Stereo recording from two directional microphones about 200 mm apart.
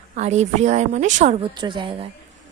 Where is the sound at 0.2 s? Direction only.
35° right (ahead or behind).